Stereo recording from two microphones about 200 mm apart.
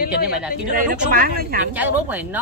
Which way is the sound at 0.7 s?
45° right (ahead or behind).